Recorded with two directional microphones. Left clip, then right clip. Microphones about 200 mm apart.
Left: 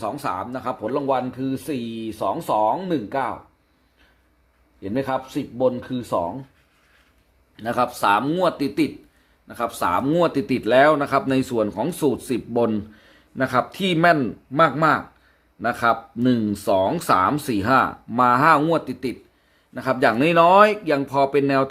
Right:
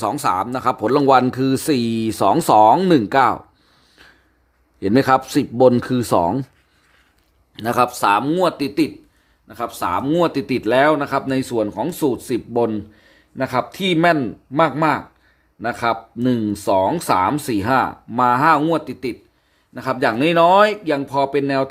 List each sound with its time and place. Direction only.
0.0 s speech: 35° right (ahead or behind)
4.8 s speech: 50° right (ahead or behind)
7.5 s speech: 30° right (ahead or behind); by 21.7 s 5° right (ahead or behind)